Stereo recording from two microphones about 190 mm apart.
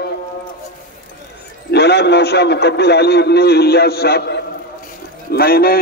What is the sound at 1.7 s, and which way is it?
A man's voice, 60° left (ahead or behind).